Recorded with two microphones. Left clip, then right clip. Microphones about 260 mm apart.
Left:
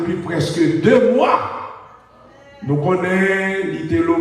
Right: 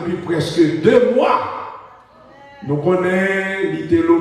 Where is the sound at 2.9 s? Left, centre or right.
Centre.